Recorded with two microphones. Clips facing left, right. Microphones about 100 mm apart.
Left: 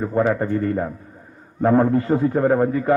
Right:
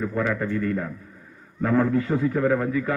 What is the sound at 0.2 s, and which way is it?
A man's voice, 35° left (ahead or behind).